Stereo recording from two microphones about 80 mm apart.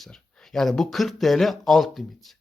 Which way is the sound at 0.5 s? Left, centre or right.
Centre.